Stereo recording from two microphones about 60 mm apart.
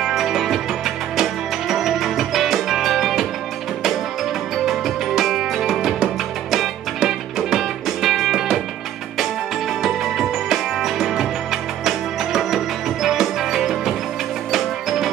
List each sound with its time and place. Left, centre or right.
0.0 s music: centre
4.6 s music: centre
9.8 s music: centre